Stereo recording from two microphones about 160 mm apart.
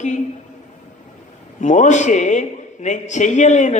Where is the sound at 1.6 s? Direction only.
50° left (ahead or behind).